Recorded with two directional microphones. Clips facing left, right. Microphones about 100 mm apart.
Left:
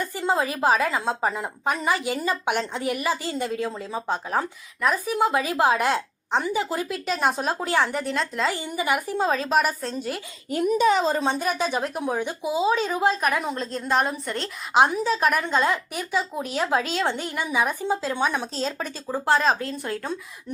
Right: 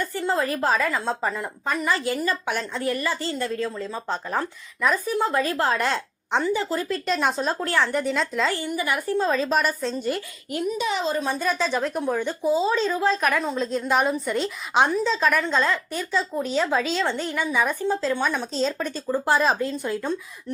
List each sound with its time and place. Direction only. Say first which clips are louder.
0.0 s a woman's voice: even; 15° left (ahead or behind)
7.9 s a woman's voice: right 2 dB; centre (ahead or behind)
8.5 s a woman's voice: left 1 dB; 20° left (ahead or behind); by 10.2 s centre (ahead or behind)
10.6 s speech: left 5 dB; 45° left (ahead or behind)
11.5 s a woman's voice: right 1 dB; 10° left (ahead or behind)